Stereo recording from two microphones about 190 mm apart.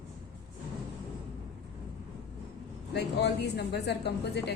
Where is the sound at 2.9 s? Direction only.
60° left (ahead or behind).